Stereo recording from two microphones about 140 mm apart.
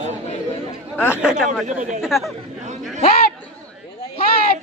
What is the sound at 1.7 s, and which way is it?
Speech, 60° right (ahead or behind).